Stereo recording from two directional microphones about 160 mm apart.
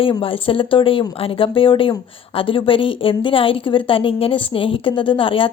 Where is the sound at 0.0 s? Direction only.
35° left (ahead or behind).